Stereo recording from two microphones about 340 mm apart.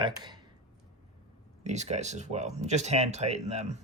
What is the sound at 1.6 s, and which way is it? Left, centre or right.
Speech, centre.